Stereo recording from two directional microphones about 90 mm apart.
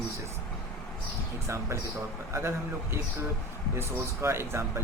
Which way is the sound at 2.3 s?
30° right (ahead or behind).